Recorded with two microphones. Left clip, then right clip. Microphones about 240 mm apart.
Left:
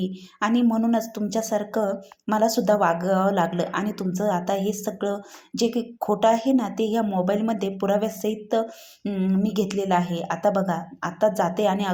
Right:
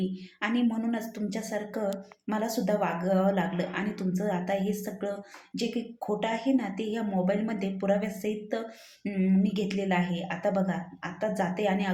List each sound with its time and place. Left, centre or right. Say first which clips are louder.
0.0 s a woman's voice: left 6 dB; left